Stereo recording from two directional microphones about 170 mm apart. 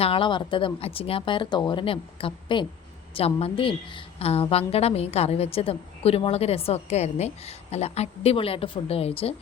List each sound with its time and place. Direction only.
0.0 s a woman's voice: 30° left (ahead or behind)